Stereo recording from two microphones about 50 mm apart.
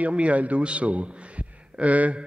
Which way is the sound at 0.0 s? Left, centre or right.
Right.